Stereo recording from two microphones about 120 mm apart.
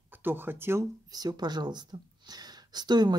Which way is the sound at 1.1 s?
35° right (ahead or behind).